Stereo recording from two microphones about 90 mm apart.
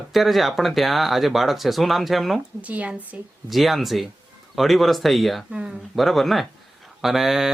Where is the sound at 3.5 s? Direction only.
Centre (ahead or behind).